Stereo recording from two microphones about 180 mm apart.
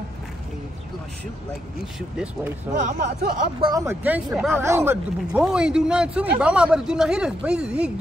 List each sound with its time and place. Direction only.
1.8 s speech: 5° right (ahead or behind)
2.7 s speech: 45° right (ahead or behind)
3.6 s speech: 20° right (ahead or behind)